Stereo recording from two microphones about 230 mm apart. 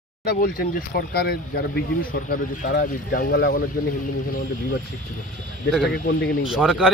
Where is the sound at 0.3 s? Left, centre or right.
Left.